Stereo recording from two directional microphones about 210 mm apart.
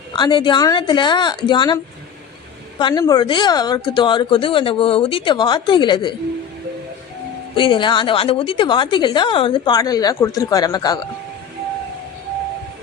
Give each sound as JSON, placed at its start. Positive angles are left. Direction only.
{"t": 0.1, "sound": "a woman's voice", "side_deg": 20}
{"t": 7.5, "sound": "a woman's voice", "side_deg": 25}